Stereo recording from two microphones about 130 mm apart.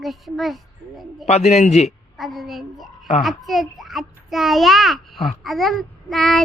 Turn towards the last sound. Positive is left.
turn(degrees=0)  # may be behind; listen again after turning